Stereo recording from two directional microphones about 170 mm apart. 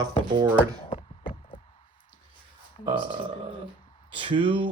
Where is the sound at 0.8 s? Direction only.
30° left (ahead or behind).